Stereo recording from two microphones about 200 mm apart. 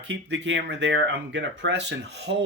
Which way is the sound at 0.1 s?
65° right (ahead or behind).